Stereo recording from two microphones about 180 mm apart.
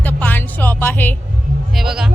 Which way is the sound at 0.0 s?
10° left (ahead or behind).